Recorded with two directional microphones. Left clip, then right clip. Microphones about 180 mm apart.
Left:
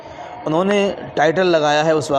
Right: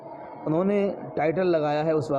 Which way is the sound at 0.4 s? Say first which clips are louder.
Left 7 dB; 10° left (ahead or behind).